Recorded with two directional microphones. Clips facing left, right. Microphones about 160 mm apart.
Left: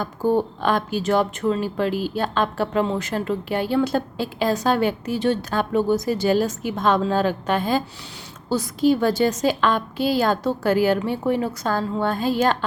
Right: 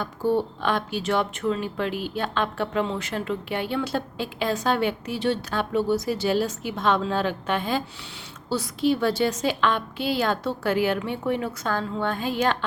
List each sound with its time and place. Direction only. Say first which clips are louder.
0.0 s speech: left 3 dB; 45° left (ahead or behind)